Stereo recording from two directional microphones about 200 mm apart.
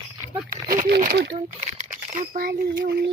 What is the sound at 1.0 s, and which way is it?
Speech, 50° right (ahead or behind).